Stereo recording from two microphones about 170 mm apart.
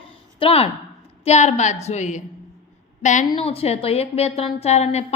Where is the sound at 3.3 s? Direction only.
35° left (ahead or behind).